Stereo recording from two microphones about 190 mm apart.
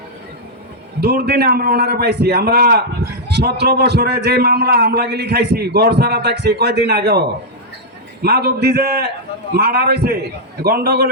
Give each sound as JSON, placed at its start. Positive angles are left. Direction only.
{"t": 1.0, "sound": "a man's voice", "side_deg": -55}